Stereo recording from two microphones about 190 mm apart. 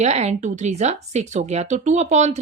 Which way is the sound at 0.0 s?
35° right (ahead or behind).